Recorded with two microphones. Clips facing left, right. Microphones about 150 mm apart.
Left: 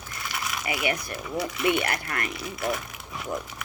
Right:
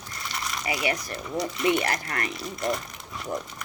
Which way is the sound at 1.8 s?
35° right (ahead or behind).